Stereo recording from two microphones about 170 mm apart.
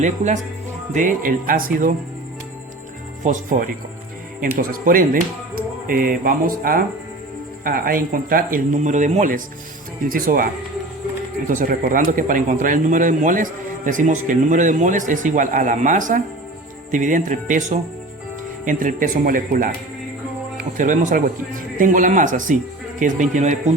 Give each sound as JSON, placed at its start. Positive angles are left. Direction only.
{"t": 0.9, "sound": "speech", "side_deg": -55}
{"t": 3.2, "sound": "speech", "side_deg": -50}
{"t": 20.7, "sound": "speech", "side_deg": -50}